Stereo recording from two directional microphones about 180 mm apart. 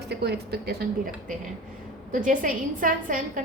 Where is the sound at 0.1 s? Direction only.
65° right (ahead or behind).